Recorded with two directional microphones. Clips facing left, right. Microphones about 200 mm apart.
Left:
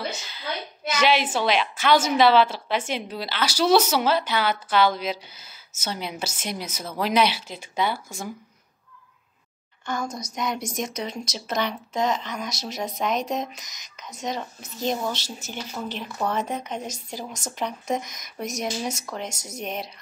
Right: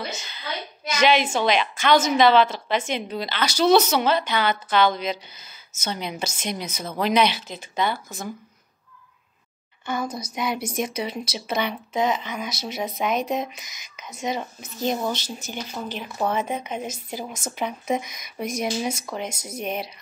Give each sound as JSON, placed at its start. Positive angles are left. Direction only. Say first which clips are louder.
{"t": 0.2, "sound": "a woman's voice", "louder": "left 1 dB", "side_deg": 5}
{"t": 9.8, "sound": "speech", "louder": "right 2 dB", "side_deg": -5}